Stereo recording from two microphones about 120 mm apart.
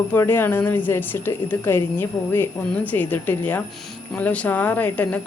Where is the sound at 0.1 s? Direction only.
20° left (ahead or behind).